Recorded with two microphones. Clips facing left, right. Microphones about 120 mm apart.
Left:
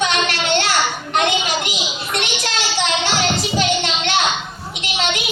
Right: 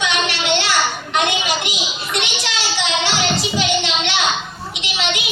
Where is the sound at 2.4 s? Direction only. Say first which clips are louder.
Left 2 dB; 45° left (ahead or behind).